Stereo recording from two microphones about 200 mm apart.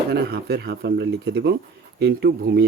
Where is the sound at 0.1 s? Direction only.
50° right (ahead or behind).